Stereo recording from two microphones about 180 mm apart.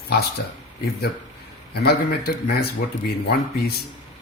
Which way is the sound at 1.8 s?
60° left (ahead or behind).